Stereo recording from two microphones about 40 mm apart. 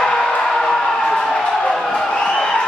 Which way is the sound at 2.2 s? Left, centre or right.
Centre.